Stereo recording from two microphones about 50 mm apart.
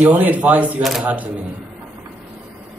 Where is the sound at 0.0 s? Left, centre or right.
Right.